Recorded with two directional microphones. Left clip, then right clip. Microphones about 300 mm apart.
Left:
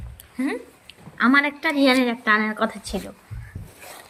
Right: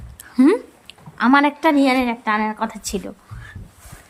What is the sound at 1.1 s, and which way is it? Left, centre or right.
A woman's voice, centre.